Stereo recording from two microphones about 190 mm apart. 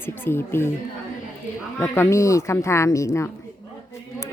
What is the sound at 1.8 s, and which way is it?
Speech, 15° left (ahead or behind).